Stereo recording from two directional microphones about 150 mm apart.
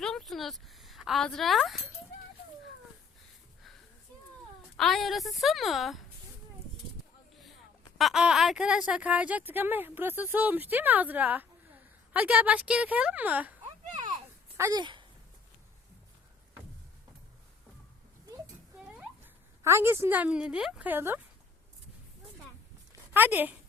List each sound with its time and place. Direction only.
0.0 s a sound: 5° left (ahead or behind)
4.8 s a woman's voice: centre (ahead or behind)
7.9 s speech: centre (ahead or behind); by 14.8 s 20° right (ahead or behind)
14.8 s speech: 30° right (ahead or behind)
18.8 s a sound: 10° right (ahead or behind)
19.6 s speech: 15° right (ahead or behind)
23.1 s speech: 10° right (ahead or behind)